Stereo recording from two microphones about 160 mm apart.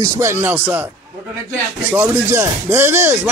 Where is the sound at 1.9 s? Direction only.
15° right (ahead or behind).